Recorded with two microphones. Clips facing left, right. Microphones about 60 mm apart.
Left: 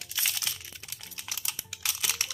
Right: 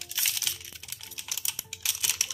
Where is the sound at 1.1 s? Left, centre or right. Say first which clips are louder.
Left 1 dB; left.